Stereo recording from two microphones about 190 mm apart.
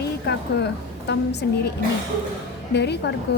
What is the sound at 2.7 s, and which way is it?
Speech, 65° left (ahead or behind).